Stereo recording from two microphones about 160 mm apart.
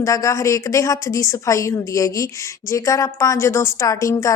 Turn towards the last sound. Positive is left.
turn(degrees=20)  # may be behind; listen again after turning